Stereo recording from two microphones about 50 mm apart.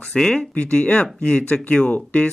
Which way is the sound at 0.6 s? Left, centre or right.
Left.